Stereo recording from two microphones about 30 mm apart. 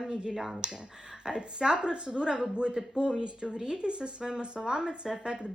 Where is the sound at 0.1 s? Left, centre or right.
Right.